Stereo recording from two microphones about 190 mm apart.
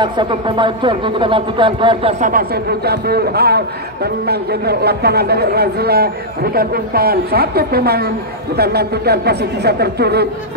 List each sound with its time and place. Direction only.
0.0 s speech: 25° right (ahead or behind)
2.1 s a man's voice: 45° right (ahead or behind)